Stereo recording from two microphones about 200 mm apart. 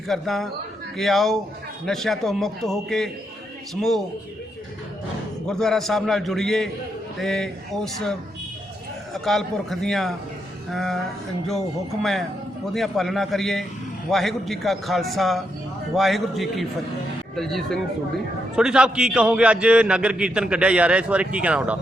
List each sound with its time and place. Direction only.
0.1 s a man's voice: centre (ahead or behind)
5.5 s a man's voice: centre (ahead or behind)
9.1 s a man's voice: centre (ahead or behind)
12.7 s a man's voice: centre (ahead or behind)